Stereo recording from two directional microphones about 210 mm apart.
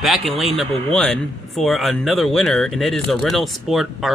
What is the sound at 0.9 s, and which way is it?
Speech, 5° left (ahead or behind).